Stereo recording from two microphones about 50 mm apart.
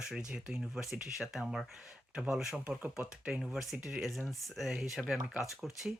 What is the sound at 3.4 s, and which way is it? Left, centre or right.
Speech, centre.